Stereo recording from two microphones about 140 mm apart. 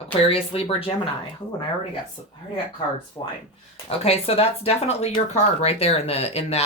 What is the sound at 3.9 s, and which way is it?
Speech, 45° left (ahead or behind).